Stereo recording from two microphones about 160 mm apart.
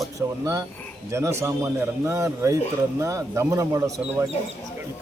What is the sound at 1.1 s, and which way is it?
A man's voice, 15° right (ahead or behind).